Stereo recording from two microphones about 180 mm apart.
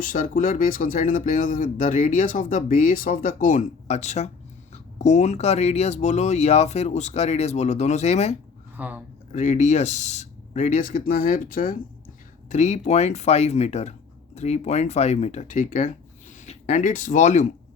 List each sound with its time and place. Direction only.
0.0 s speech: 50° left (ahead or behind)
8.7 s speech: 10° right (ahead or behind)
9.3 s speech: 40° left (ahead or behind)